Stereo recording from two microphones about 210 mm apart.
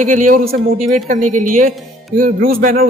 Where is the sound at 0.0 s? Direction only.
40° right (ahead or behind).